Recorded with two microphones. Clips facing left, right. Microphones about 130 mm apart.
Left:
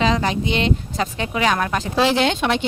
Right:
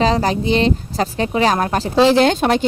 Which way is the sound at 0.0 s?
35° right (ahead or behind).